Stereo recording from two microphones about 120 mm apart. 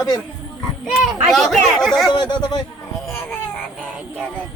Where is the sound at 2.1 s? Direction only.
35° left (ahead or behind).